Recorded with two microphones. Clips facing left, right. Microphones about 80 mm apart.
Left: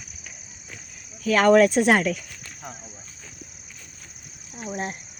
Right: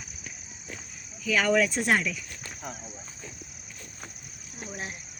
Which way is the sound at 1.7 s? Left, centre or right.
Left.